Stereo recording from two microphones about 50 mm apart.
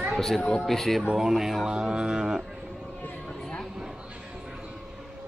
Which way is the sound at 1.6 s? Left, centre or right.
Centre.